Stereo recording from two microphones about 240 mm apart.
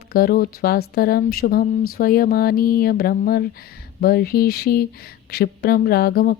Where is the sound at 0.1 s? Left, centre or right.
Left.